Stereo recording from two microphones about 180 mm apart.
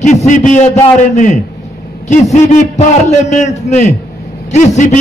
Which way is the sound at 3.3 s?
40° left (ahead or behind).